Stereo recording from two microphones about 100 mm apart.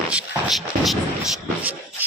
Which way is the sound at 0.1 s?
10° right (ahead or behind).